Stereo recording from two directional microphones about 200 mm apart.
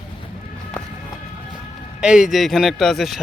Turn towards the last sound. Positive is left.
turn(degrees=0)  # may be behind; listen again after turning